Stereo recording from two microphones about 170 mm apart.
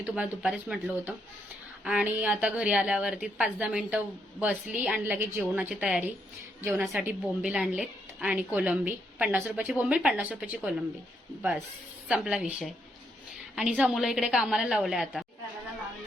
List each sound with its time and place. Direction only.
0.0 s a woman's voice: 5° right (ahead or behind)
12.0 s a woman's voice: 5° right (ahead or behind)